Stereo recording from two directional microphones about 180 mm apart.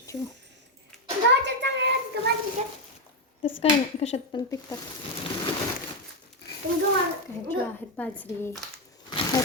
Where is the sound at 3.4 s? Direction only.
35° left (ahead or behind).